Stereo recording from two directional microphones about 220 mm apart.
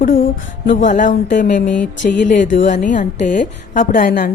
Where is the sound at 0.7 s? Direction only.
35° left (ahead or behind).